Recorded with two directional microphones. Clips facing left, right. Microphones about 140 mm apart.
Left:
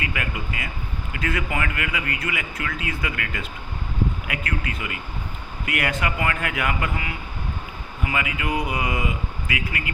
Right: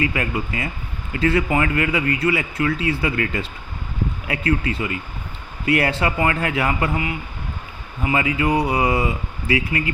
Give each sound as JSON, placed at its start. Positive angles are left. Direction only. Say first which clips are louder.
{"t": 0.0, "sound": "speech", "louder": "right 7 dB", "side_deg": -30}